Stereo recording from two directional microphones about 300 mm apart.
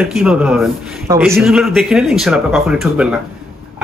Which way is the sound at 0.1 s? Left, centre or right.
Centre.